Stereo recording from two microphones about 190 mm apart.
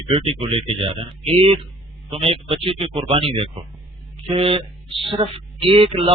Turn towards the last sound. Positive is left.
turn(degrees=-25)  # may be behind; listen again after turning